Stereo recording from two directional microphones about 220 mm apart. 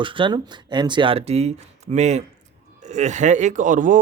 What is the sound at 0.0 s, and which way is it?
A man's voice, 20° right (ahead or behind).